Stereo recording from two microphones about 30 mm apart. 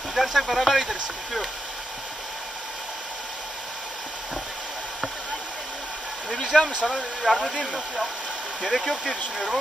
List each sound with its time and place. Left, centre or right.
0.1 s a sound: centre
0.4 s speech: centre
6.5 s speech: centre
7.3 s speech: right
8.6 s speech: centre